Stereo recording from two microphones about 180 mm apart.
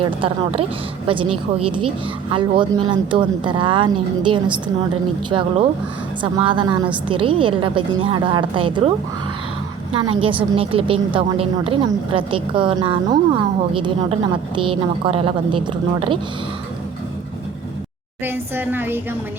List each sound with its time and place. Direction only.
0.0 s a woman's voice: 30° right (ahead or behind)
9.9 s a woman's voice: 30° right (ahead or behind)
18.2 s speech: 10° right (ahead or behind)